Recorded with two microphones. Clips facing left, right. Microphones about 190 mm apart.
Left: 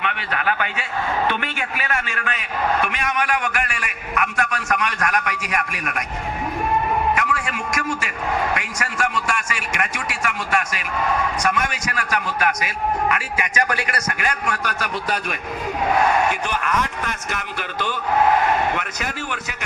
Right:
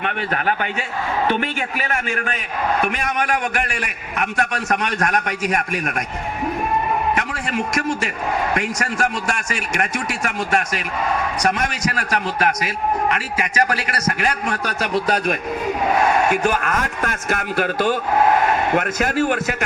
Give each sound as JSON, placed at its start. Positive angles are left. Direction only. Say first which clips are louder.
{"t": 0.0, "sound": "a man's voice", "louder": "right 2 dB", "side_deg": -45}
{"t": 7.2, "sound": "a man's voice", "louder": "right 2 dB", "side_deg": -40}